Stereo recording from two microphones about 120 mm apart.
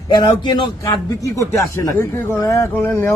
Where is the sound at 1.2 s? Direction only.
25° left (ahead or behind).